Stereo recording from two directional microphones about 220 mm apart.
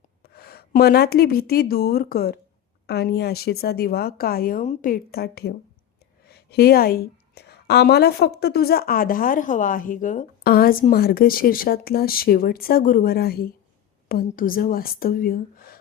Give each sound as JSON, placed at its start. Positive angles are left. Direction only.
{"t": 0.2, "sound": "a woman's voice", "side_deg": 45}